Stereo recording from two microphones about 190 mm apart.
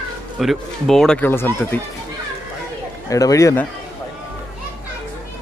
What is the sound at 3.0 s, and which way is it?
Speech, 15° left (ahead or behind).